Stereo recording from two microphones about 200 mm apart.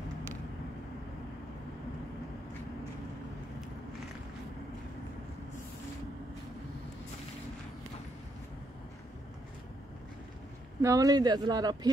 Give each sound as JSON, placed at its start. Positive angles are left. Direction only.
{"t": 10.8, "sound": "speech", "side_deg": -15}